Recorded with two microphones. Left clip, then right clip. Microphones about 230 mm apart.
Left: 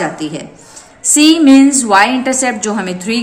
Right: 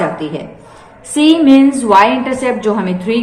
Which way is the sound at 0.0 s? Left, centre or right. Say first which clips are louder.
Right 1 dB; left.